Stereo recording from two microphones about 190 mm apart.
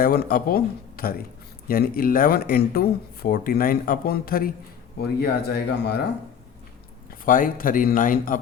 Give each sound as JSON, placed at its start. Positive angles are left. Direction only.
{"t": 0.0, "sound": "speech", "side_deg": 50}
{"t": 7.3, "sound": "speech", "side_deg": 45}